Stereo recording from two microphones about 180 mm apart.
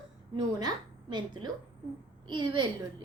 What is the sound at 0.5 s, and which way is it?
A woman's voice, 25° right (ahead or behind).